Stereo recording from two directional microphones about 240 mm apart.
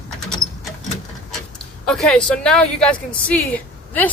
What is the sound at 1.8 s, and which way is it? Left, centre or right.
Speech, centre.